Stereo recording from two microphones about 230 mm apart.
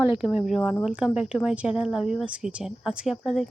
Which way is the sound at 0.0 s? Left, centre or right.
Centre.